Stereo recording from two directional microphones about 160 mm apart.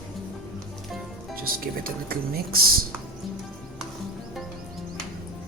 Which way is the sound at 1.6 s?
65° right (ahead or behind).